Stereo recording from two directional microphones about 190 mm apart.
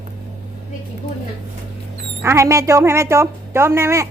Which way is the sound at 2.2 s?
15° right (ahead or behind).